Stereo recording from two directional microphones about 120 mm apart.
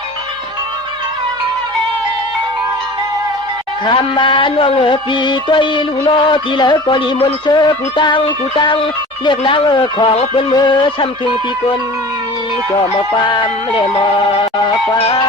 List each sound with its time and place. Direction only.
3.8 s music: 40° left (ahead or behind)